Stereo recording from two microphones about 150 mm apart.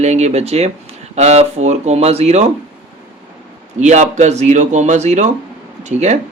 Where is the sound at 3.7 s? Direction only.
55° right (ahead or behind).